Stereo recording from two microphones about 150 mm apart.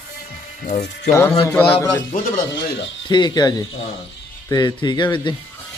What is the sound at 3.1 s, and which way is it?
Speech, 30° left (ahead or behind).